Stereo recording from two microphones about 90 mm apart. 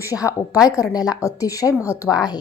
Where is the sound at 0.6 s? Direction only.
40° left (ahead or behind).